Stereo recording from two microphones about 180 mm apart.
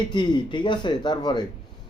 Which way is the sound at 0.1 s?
25° left (ahead or behind).